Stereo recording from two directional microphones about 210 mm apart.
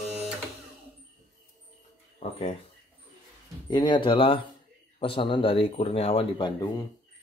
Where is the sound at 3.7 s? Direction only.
20° left (ahead or behind).